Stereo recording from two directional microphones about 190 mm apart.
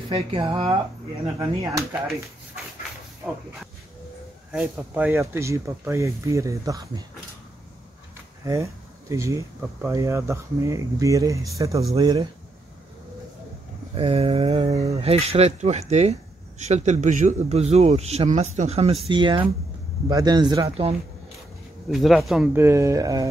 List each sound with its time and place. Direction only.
0.1 s speech: 30° right (ahead or behind)
1.4 s speech: 15° right (ahead or behind)
4.5 s speech: 10° right (ahead or behind)
9.1 s speech: 15° right (ahead or behind)
13.9 s speech: 30° right (ahead or behind)
14.7 s speech: 15° right (ahead or behind)
15.0 s speech: 30° right (ahead or behind)
21.8 s speech: centre (ahead or behind)
22.5 s speech: 15° right (ahead or behind)